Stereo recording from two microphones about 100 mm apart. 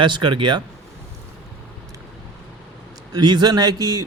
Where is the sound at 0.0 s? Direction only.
50° right (ahead or behind).